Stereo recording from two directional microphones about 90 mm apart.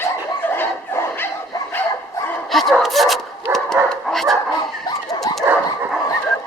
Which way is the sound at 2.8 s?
Centre (ahead or behind).